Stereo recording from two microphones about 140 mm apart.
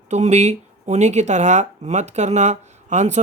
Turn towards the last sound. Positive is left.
turn(degrees=-55)  # may be behind; listen again after turning